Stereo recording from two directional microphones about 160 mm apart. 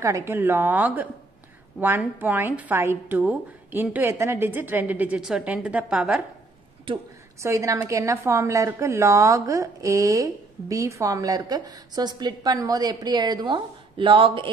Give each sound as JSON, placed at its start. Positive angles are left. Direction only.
{"t": 0.0, "sound": "a woman's voice", "side_deg": -15}
{"t": 7.4, "sound": "a woman's voice", "side_deg": -20}